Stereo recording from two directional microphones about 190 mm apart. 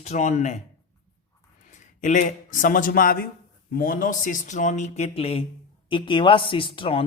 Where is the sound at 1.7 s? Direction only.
40° left (ahead or behind).